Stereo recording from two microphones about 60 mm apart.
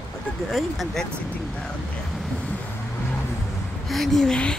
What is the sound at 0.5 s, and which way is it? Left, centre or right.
Speech, centre.